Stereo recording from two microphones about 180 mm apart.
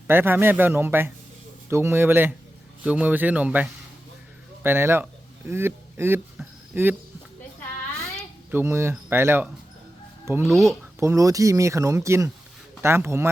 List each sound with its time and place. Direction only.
0.1 s speech: 10° right (ahead or behind)
8.4 s speech: 15° right (ahead or behind)
10.5 s speech: centre (ahead or behind)
11.0 s speech: 20° right (ahead or behind)